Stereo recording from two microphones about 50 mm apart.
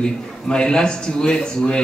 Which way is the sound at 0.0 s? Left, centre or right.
Centre.